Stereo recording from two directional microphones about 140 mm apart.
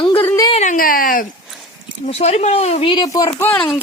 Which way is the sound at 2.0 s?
50° left (ahead or behind).